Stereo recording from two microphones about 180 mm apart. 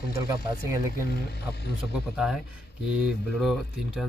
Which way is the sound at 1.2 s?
65° left (ahead or behind).